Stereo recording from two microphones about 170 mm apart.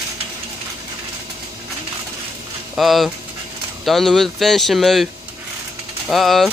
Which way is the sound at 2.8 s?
Centre (ahead or behind).